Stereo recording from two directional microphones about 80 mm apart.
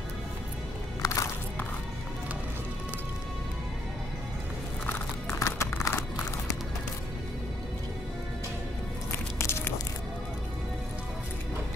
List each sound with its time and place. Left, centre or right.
1.0 s music: left
5.4 s clip-clop: left
9.4 s a sound: left